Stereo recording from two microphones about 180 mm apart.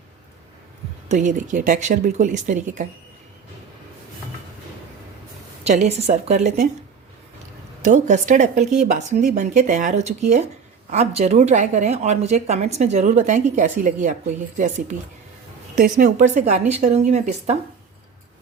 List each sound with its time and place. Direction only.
1.0 s speech: 45° right (ahead or behind)
5.6 s a woman's voice: 40° right (ahead or behind)
7.8 s a woman's voice: 40° right (ahead or behind)
16.0 s a woman's voice: 45° right (ahead or behind)